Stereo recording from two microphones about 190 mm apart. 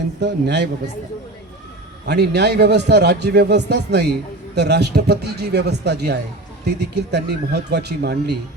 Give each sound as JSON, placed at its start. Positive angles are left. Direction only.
{"t": 0.2, "sound": "a man's voice", "side_deg": -65}
{"t": 2.0, "sound": "a man's voice", "side_deg": -60}